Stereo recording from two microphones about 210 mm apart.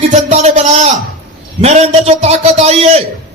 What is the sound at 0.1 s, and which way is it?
A man's voice, 35° right (ahead or behind).